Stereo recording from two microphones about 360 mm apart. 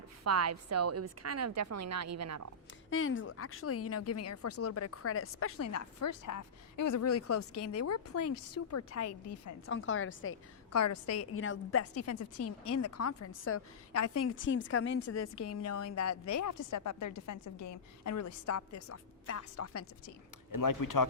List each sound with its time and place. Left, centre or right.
0.3 s a woman's voice: right
2.9 s a woman's voice: left
15.1 s a woman's voice: left
20.6 s speech: left